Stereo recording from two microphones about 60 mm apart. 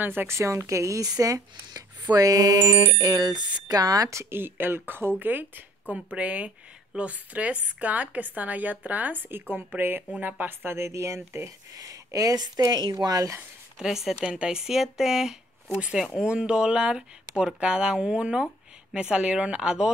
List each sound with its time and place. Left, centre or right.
0.0 s speech: right
0.3 s speech: right
4.1 s a woman's voice: right
10.9 s speech: right
11.7 s speech: right
13.7 s speech: centre